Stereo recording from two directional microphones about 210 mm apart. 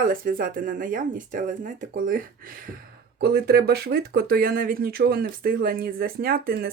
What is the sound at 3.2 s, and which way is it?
Speech, 50° right (ahead or behind).